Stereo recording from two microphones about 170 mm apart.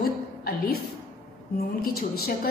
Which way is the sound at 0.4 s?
65° left (ahead or behind).